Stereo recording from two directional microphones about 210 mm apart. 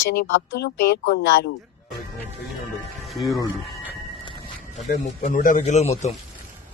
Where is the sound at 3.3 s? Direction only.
15° left (ahead or behind).